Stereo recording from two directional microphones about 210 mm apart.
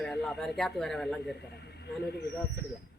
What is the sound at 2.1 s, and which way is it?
Speech, 50° left (ahead or behind).